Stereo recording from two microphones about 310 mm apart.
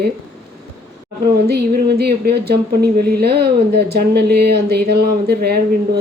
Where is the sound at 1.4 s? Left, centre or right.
Right.